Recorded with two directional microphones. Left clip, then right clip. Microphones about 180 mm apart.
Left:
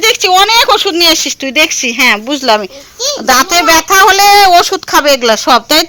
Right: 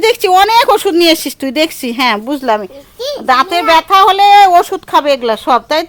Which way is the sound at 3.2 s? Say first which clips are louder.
Left 2 dB; 5° left (ahead or behind).